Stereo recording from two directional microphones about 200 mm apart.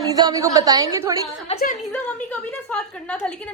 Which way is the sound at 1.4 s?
30° left (ahead or behind).